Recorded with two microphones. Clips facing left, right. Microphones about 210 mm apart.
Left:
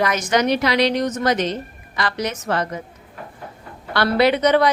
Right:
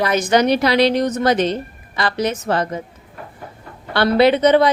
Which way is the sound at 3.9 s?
25° right (ahead or behind).